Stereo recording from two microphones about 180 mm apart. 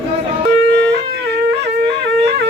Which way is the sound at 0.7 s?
65° right (ahead or behind).